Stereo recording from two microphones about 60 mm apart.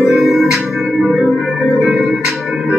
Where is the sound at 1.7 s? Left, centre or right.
Centre.